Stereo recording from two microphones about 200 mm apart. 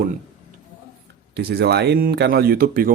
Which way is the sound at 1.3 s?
55° right (ahead or behind).